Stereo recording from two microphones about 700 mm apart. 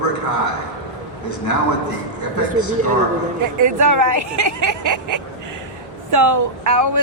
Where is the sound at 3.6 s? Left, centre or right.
Right.